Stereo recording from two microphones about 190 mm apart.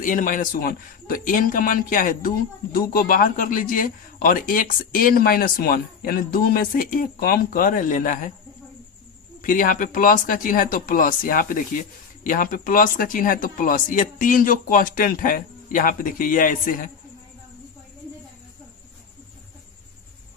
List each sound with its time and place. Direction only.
0.0 s speech: 45° left (ahead or behind)
9.4 s speech: 45° left (ahead or behind)